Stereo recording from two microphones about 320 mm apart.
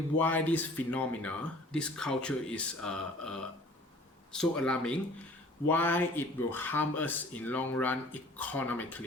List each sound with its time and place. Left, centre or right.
0.2 s speech: centre